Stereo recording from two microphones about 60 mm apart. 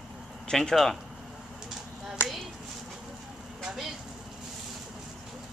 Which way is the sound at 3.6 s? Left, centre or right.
Centre.